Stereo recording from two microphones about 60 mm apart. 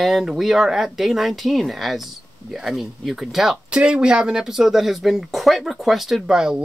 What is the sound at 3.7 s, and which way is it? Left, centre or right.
Speech, centre.